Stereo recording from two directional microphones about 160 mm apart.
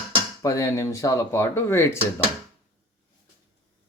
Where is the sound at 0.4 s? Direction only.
20° left (ahead or behind).